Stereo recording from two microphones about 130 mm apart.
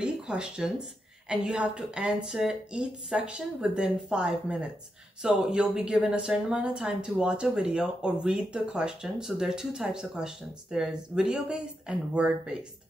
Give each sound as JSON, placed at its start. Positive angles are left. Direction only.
{"t": 0.0, "sound": "speech", "side_deg": -5}